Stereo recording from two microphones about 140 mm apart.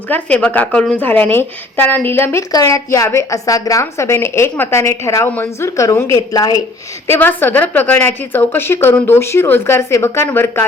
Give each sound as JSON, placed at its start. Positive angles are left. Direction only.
{"t": 0.1, "sound": "a woman's voice", "side_deg": 10}
{"t": 7.1, "sound": "a woman's voice", "side_deg": 15}